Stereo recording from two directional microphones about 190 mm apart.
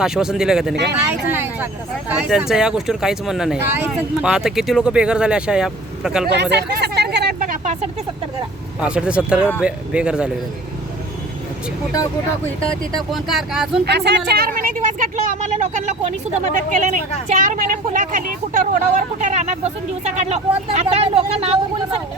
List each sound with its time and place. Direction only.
0.0 s speech: 5° right (ahead or behind)
6.3 s hubbub: 60° right (ahead or behind); by 7.9 s 35° right (ahead or behind)
8.8 s speech: 5° right (ahead or behind)
13.0 s speech: centre (ahead or behind)
13.8 s a woman's voice: 60° right (ahead or behind); by 22.0 s 30° right (ahead or behind)